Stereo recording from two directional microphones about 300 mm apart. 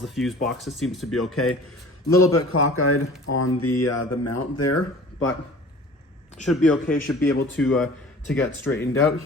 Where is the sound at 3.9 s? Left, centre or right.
Left.